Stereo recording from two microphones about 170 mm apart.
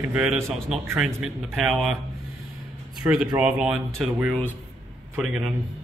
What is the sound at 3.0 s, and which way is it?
A man's voice, 5° right (ahead or behind).